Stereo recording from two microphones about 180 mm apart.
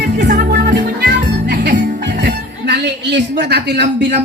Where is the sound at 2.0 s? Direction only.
70° right (ahead or behind).